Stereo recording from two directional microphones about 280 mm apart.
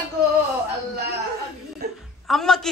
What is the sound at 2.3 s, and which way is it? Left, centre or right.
Speech, centre.